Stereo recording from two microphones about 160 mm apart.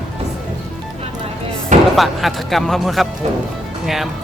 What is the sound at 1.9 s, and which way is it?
Speech, centre (ahead or behind).